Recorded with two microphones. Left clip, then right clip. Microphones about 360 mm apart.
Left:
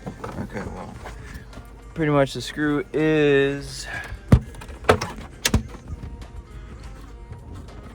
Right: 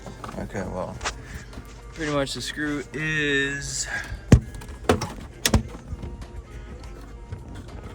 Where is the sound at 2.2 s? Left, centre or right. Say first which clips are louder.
Left 4 dB; centre.